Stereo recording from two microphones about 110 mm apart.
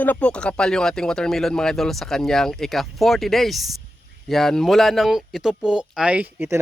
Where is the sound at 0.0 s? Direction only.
15° left (ahead or behind).